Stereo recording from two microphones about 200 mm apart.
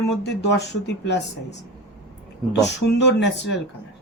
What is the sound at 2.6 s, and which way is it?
Speech, 60° left (ahead or behind).